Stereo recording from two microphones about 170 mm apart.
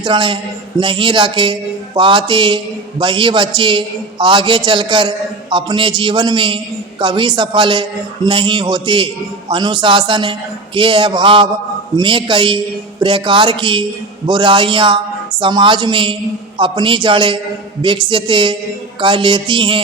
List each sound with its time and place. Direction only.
0.0 s a man's voice: 30° right (ahead or behind)